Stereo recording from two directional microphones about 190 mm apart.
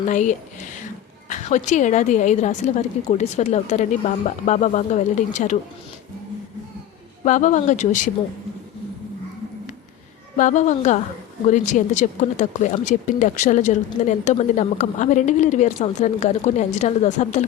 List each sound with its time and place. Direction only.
0.1 s speech: 40° left (ahead or behind)
7.3 s speech: 40° left (ahead or behind)
10.3 s speech: 40° left (ahead or behind)